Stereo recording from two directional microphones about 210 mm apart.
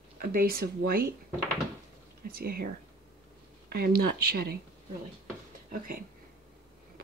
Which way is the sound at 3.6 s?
45° right (ahead or behind).